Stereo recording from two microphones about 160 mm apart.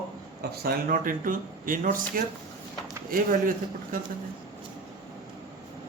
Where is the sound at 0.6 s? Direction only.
65° right (ahead or behind).